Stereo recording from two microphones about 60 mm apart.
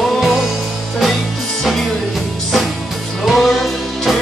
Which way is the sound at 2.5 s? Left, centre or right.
Centre.